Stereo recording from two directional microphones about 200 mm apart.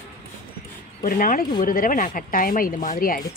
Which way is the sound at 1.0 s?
45° left (ahead or behind).